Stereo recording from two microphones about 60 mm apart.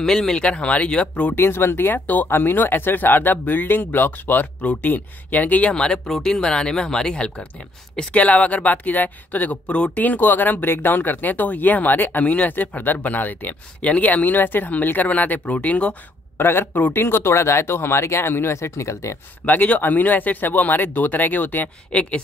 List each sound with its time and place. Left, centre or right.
0.0 s speech: centre
1.3 s speech: left
2.2 s speech: left
16.3 s speech: left
19.4 s speech: left